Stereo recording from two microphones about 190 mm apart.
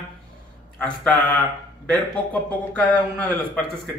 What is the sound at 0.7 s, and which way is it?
Speech, 5° left (ahead or behind).